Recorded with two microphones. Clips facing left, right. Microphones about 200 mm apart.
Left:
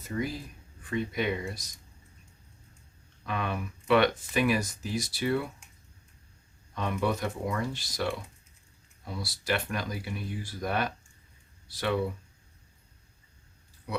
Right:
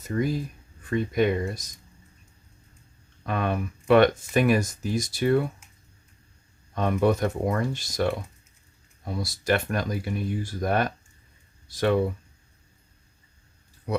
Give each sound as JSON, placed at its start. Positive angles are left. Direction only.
{"t": 0.1, "sound": "speech", "side_deg": -50}
{"t": 3.2, "sound": "speech", "side_deg": -50}
{"t": 6.7, "sound": "speech", "side_deg": -50}